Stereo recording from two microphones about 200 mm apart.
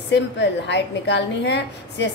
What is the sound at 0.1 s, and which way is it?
A woman's voice, 60° left (ahead or behind).